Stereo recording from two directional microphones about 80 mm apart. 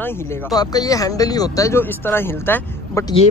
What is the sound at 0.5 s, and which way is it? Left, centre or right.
Speech, left.